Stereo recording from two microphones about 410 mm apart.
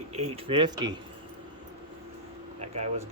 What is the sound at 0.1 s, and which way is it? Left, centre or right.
Speech, centre.